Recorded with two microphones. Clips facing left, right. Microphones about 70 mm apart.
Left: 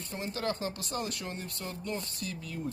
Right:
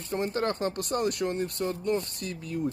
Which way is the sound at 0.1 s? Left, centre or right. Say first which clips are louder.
Right 6 dB; right.